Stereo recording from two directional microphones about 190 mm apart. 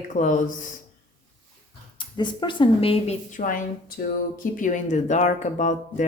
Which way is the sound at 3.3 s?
45° left (ahead or behind).